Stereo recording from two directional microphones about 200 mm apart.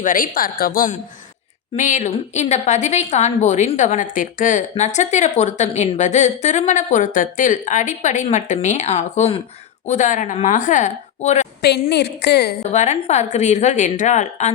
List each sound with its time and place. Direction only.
0.0 s a woman's voice: 45° left (ahead or behind)
11.6 s a woman's voice: 55° left (ahead or behind)
12.7 s a woman's voice: 35° left (ahead or behind)